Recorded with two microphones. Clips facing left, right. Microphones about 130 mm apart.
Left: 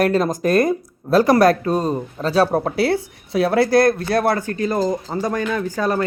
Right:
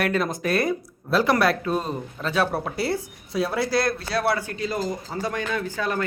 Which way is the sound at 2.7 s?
70° left (ahead or behind).